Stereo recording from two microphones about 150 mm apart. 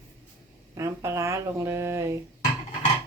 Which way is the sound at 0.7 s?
20° right (ahead or behind).